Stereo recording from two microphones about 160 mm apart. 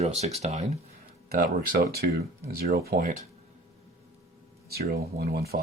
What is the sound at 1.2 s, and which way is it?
Speech, 70° right (ahead or behind).